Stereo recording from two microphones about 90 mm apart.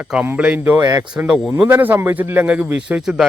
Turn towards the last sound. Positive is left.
turn(degrees=-5)  # may be behind; listen again after turning